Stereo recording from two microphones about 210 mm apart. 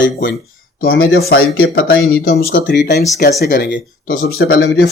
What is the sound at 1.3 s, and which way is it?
Speech, 50° left (ahead or behind).